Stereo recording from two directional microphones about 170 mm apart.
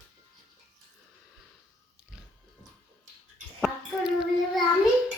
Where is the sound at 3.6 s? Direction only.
Centre (ahead or behind).